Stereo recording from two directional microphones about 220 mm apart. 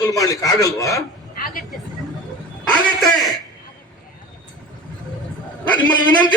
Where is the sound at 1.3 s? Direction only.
40° left (ahead or behind).